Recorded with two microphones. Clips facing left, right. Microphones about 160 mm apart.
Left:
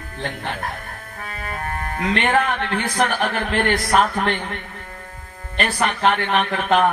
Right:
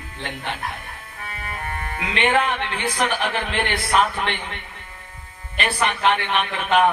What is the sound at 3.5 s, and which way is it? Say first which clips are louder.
Speech: left 4 dB; 45° left (ahead or behind).